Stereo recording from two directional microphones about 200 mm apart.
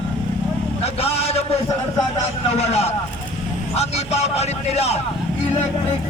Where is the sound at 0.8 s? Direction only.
30° left (ahead or behind).